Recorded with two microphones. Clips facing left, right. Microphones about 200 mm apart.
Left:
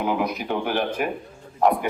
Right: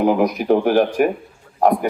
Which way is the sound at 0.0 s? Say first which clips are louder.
Right 8 dB; 45° right (ahead or behind).